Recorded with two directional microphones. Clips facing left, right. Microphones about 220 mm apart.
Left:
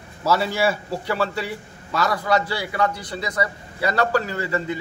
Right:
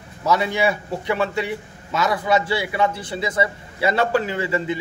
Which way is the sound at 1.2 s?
20° right (ahead or behind).